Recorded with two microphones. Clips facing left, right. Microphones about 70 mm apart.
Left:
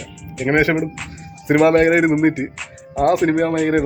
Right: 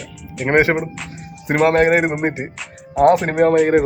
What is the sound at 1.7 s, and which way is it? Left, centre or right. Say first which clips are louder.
Speech: left 1 dB; right.